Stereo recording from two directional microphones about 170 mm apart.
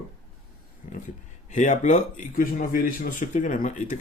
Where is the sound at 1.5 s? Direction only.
45° left (ahead or behind).